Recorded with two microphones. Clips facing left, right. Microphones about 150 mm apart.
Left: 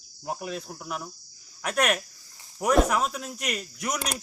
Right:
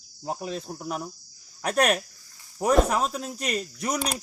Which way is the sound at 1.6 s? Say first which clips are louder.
Right 3 dB; 35° right (ahead or behind).